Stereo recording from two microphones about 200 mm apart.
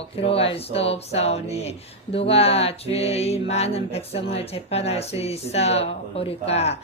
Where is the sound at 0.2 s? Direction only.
30° left (ahead or behind).